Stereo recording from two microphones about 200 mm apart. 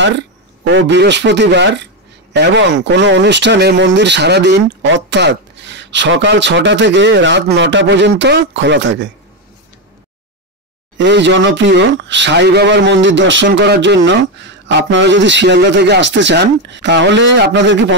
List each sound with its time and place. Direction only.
0.7 s speech: 65° right (ahead or behind)
11.0 s speech: 60° right (ahead or behind)